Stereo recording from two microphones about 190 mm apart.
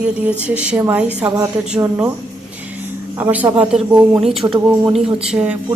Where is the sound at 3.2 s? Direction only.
10° right (ahead or behind).